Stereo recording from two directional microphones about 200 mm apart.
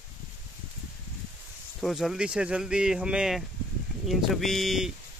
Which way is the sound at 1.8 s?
Centre (ahead or behind).